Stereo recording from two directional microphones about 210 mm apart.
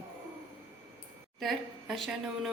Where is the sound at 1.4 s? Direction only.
Centre (ahead or behind).